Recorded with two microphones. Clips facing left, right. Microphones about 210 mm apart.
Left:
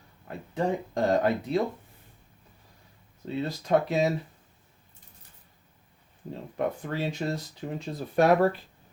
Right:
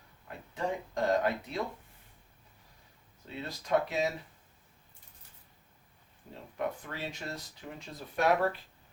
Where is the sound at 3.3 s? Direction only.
30° left (ahead or behind).